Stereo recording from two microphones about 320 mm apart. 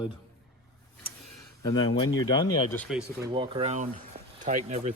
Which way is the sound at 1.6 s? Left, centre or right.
Centre.